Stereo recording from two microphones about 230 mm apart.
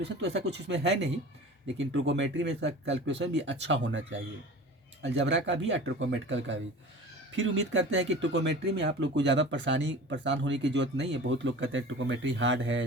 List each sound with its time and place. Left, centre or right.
0.0 s speech: right
5.0 s speech: right